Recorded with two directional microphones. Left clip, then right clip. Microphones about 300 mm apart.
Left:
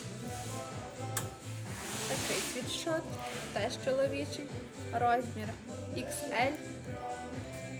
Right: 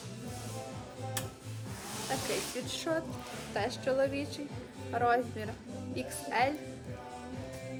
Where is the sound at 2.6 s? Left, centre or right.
Centre.